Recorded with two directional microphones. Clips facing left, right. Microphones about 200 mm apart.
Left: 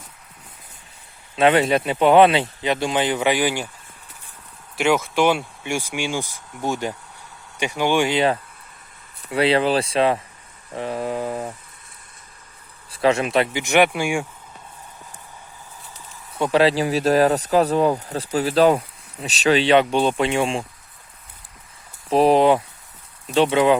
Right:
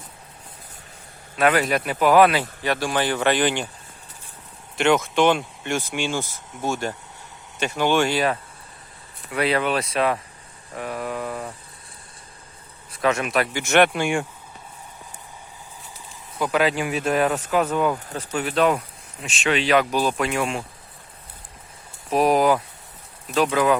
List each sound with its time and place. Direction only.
1.4 s speech: 25° left (ahead or behind); by 3.7 s 10° left (ahead or behind)
4.8 s speech: 5° left (ahead or behind)
9.3 s speech: 30° left (ahead or behind)
12.9 s speech: 30° left (ahead or behind)
13.5 s speech: 15° left (ahead or behind)
16.4 s speech: 30° left (ahead or behind)
22.1 s speech: 30° left (ahead or behind)